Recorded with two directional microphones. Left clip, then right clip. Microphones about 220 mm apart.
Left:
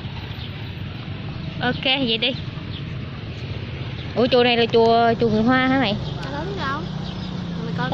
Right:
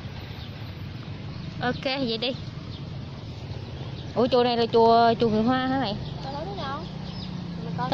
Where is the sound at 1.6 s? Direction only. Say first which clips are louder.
Left 6 dB; 5° right (ahead or behind).